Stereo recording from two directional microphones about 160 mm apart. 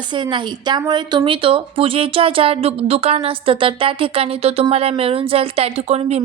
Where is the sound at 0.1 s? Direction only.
30° right (ahead or behind).